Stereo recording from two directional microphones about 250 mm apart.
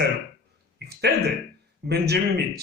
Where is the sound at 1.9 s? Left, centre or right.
Right.